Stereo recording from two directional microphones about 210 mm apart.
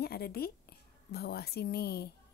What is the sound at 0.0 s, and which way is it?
A woman's voice, 50° left (ahead or behind).